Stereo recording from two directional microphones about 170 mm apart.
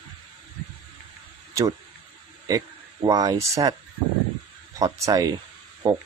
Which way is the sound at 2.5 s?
20° right (ahead or behind).